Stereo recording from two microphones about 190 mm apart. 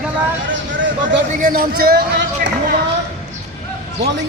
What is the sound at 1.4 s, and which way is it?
Speech, 50° right (ahead or behind).